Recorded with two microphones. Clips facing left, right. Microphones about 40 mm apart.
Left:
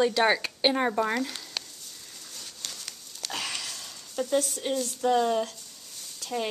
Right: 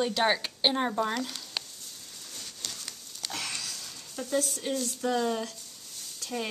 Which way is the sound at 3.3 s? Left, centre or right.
Left.